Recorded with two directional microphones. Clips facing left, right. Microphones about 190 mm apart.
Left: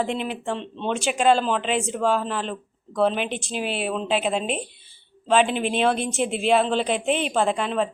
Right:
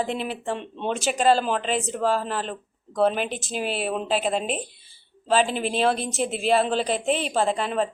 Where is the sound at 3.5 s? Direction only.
40° right (ahead or behind).